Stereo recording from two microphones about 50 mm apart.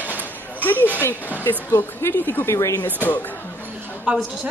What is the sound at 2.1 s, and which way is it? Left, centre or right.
Speech, left.